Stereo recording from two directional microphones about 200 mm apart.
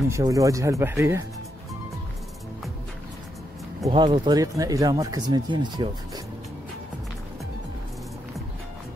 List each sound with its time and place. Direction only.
0.1 s speech: 15° right (ahead or behind)
3.8 s speech: 25° right (ahead or behind)